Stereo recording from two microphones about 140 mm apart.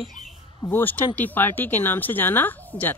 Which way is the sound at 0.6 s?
15° left (ahead or behind).